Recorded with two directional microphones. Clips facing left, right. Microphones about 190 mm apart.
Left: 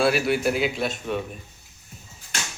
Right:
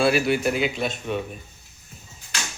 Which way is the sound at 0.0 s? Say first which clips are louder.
Right 1 dB; centre (ahead or behind).